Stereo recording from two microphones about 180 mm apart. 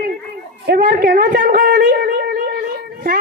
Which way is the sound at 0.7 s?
50° right (ahead or behind).